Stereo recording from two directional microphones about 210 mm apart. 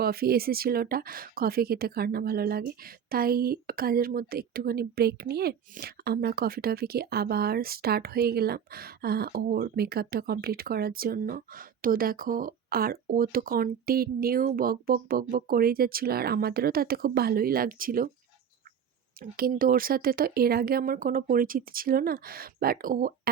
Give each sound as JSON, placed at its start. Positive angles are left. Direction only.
{"t": 0.0, "sound": "speech", "side_deg": -45}
{"t": 19.2, "sound": "speech", "side_deg": -45}